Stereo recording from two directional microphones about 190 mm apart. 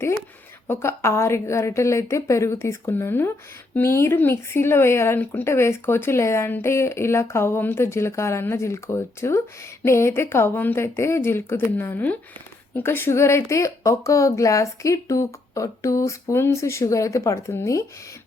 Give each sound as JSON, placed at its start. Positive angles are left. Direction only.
{"t": 0.7, "sound": "speech", "side_deg": 15}